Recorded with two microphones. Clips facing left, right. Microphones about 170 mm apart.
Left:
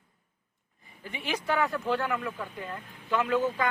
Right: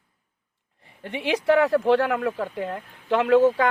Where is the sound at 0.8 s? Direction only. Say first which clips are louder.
Right 9 dB; 75° right (ahead or behind).